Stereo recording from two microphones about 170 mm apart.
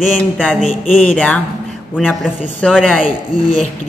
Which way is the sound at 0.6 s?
50° left (ahead or behind).